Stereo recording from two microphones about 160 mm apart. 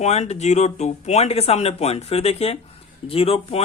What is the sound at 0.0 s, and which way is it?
Speech, 45° left (ahead or behind).